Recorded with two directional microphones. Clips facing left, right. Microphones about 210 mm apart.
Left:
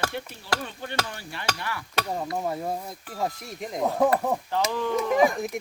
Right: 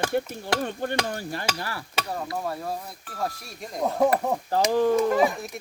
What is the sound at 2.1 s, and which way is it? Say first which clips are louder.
Speech: left 1 dB; 15° left (ahead or behind).